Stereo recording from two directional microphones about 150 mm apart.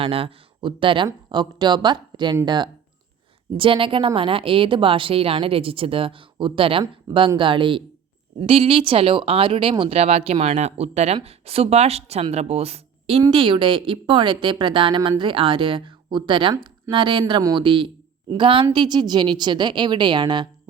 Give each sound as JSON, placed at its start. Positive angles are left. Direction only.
{"t": 0.0, "sound": "speech", "side_deg": -40}